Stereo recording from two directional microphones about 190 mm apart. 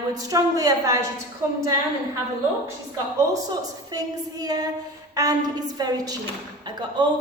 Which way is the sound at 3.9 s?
20° right (ahead or behind).